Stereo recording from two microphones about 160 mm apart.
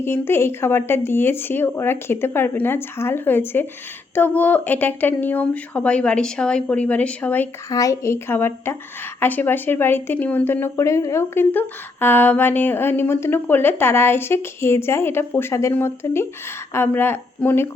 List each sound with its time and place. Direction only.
0.0 s speech: 15° left (ahead or behind)
7.7 s speech: 20° left (ahead or behind)